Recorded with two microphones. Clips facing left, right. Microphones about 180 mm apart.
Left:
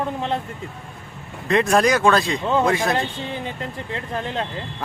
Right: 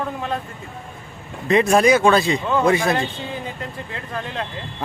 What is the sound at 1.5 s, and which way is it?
Speech, centre (ahead or behind).